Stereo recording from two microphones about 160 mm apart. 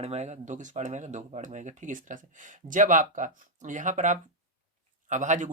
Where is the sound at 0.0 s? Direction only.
40° right (ahead or behind).